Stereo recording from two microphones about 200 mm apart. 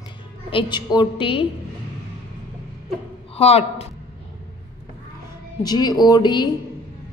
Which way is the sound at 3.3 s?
30° left (ahead or behind).